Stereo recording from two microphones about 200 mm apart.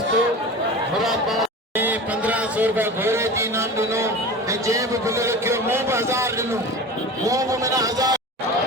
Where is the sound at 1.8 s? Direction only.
10° right (ahead or behind).